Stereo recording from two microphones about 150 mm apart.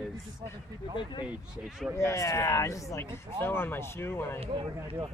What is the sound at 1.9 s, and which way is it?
Speech, 20° left (ahead or behind).